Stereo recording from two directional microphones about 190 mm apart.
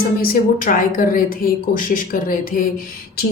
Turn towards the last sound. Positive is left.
turn(degrees=50)  # may be behind; listen again after turning